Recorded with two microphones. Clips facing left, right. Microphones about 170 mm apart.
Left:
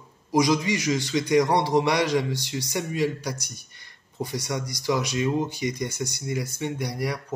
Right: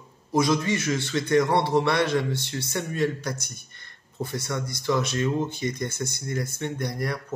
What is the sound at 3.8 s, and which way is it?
Speech, 15° left (ahead or behind).